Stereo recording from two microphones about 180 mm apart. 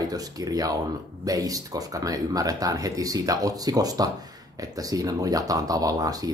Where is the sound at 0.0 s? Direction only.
20° right (ahead or behind).